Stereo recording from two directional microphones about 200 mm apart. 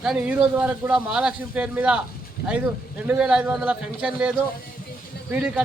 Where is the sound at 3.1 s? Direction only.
5° right (ahead or behind).